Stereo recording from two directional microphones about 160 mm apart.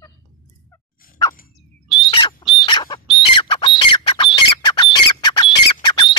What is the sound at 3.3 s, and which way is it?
Squawk, 30° left (ahead or behind).